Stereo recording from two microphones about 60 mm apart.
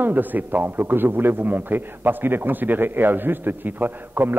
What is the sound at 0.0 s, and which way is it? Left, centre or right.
A man's voice, right.